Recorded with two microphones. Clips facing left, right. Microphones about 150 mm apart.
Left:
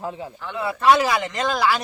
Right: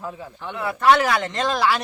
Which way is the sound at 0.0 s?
20° left (ahead or behind).